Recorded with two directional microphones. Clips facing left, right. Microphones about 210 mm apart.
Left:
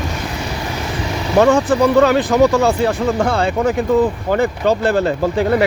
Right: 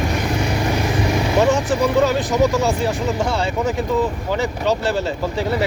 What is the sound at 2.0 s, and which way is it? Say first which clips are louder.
Speech: left 5 dB; 65° left (ahead or behind).